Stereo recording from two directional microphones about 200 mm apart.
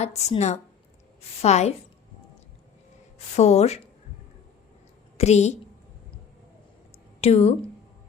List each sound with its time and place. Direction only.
0.0 s speech: 35° left (ahead or behind)
3.3 s speech: 35° left (ahead or behind)
5.1 s a woman's voice: 35° left (ahead or behind)
7.2 s speech: 30° left (ahead or behind)